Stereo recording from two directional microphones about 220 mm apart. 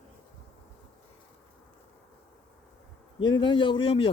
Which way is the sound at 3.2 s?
20° left (ahead or behind).